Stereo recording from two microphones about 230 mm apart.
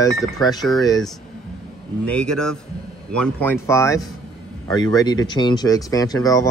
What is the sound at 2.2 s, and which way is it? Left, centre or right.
Speech, right.